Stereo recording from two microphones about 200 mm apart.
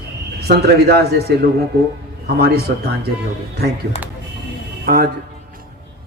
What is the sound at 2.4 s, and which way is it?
Speech, 50° right (ahead or behind).